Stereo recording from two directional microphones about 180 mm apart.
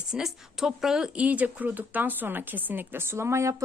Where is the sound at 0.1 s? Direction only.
Centre (ahead or behind).